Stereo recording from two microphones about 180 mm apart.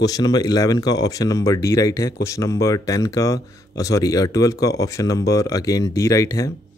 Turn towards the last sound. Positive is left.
turn(degrees=20)  # may be behind; listen again after turning